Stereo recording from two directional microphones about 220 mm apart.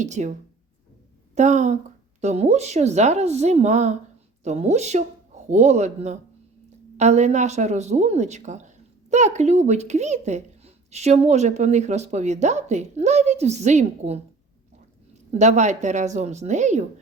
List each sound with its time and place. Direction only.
0.0 s speech: 35° right (ahead or behind)
1.4 s speech: 35° right (ahead or behind)
15.3 s speech: 30° right (ahead or behind)